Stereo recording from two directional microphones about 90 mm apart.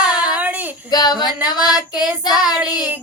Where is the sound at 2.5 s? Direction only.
20° right (ahead or behind).